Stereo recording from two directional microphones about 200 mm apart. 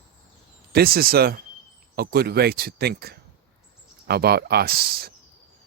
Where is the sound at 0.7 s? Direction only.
50° right (ahead or behind).